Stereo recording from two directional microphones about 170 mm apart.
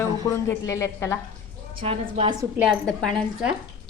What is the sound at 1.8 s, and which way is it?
Speech, 30° right (ahead or behind).